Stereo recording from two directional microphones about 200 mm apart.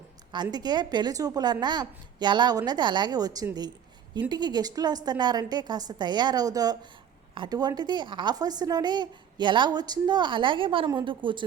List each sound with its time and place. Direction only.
0.5 s a woman's voice: 20° right (ahead or behind)